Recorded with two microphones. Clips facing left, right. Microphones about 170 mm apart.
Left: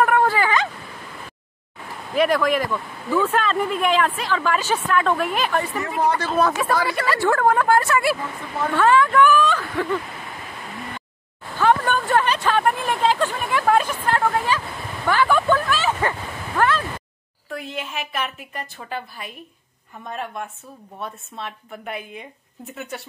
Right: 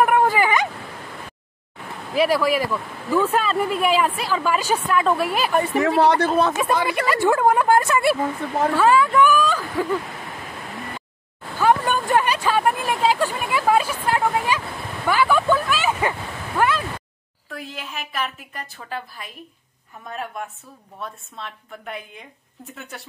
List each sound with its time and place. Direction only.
0.0 s a sound: 15° right (ahead or behind)
2.1 s speech: 5° right (ahead or behind)
5.8 s speech: 85° right
6.3 s speech: 20° right (ahead or behind)
11.5 s a sound: 10° right (ahead or behind)
17.5 s a woman's voice: centre (ahead or behind)